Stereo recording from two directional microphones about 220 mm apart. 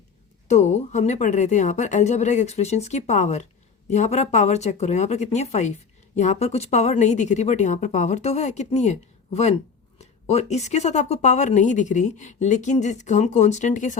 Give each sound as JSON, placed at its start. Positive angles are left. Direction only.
{"t": 0.4, "sound": "speech", "side_deg": 30}